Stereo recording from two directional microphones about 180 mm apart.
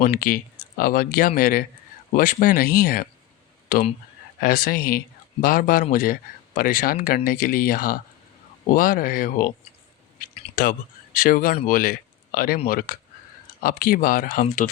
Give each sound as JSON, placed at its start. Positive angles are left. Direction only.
{"t": 0.0, "sound": "speech", "side_deg": 55}
{"t": 4.4, "sound": "speech", "side_deg": 55}
{"t": 10.5, "sound": "speech", "side_deg": 50}